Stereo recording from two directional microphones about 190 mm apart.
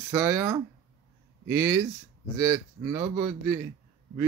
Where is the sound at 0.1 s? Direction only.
15° right (ahead or behind).